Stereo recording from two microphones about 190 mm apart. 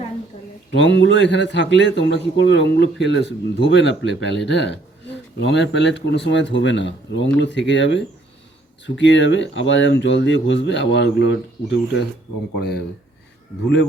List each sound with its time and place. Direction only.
0.7 s a man's voice: 70° left (ahead or behind)